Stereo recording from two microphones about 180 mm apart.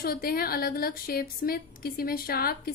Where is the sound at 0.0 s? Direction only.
55° left (ahead or behind).